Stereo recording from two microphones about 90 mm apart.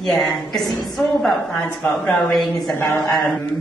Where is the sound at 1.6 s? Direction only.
15° left (ahead or behind).